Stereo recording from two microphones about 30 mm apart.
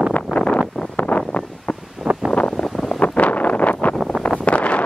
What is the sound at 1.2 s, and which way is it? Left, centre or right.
Wind noise, left.